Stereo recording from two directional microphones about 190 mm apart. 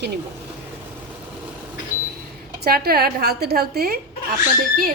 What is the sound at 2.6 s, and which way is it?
A woman's voice, 55° right (ahead or behind).